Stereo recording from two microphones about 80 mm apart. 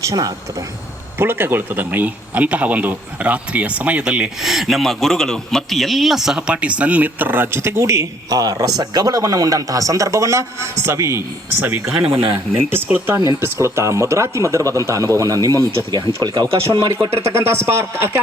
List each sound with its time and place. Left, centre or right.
0.0 s speech: right
1.2 s a man's voice: right; by 4.3 s centre
4.4 s speech: centre; by 11.6 s right
11.6 s a man's voice: right
16.2 s speech: right
16.7 s speech: right
17.3 s speech: right